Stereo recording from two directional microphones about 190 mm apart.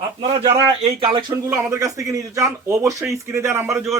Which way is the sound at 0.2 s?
30° right (ahead or behind).